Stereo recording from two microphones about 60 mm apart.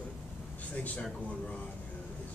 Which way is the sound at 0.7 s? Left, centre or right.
Left.